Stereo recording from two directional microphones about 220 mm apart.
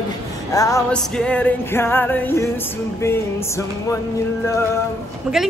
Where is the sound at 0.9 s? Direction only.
5° left (ahead or behind).